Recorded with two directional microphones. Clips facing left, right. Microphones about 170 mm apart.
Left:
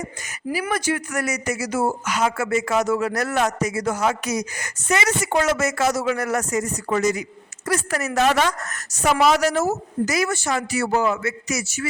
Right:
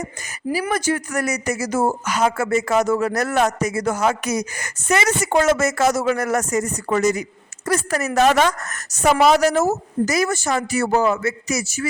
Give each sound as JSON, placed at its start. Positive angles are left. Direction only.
{"t": 0.5, "sound": "a man's voice", "side_deg": -40}